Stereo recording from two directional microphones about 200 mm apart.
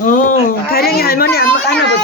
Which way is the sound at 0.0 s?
40° left (ahead or behind).